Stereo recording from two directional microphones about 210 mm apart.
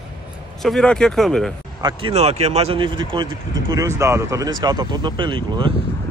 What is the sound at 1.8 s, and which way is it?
Speech, 25° right (ahead or behind).